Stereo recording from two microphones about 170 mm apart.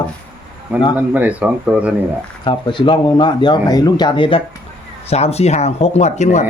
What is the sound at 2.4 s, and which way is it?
Speech, 30° left (ahead or behind).